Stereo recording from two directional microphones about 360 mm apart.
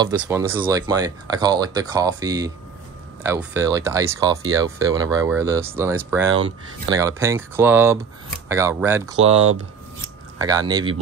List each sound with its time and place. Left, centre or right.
0.0 s speech: centre
6.2 s speech: right
7.0 s speech: centre
10.4 s speech: centre